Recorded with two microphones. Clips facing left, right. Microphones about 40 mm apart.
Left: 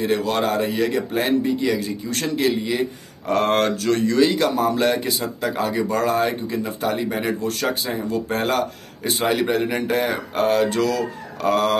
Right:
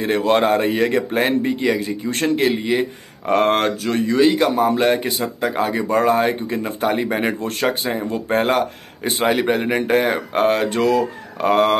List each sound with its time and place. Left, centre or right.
0.0 s a man's voice: right